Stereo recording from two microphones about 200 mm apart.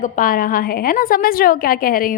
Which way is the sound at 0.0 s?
45° left (ahead or behind).